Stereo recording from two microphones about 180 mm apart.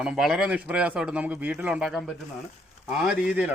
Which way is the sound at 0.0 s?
5° right (ahead or behind).